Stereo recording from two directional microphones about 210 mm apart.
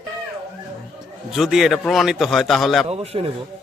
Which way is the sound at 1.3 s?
Centre (ahead or behind).